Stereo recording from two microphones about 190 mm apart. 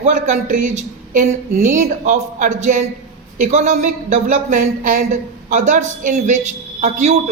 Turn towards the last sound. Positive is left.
turn(degrees=-40)  # may be behind; listen again after turning